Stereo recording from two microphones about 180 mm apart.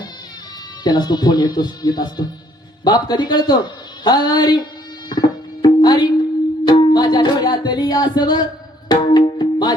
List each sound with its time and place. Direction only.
0.9 s music: 25° left (ahead or behind)
2.8 s a sound: 20° left (ahead or behind)
6.7 s music: 25° left (ahead or behind)